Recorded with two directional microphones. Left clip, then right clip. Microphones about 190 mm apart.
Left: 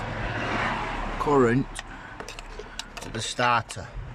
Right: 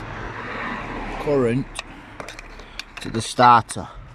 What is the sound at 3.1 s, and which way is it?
Speech, 25° right (ahead or behind).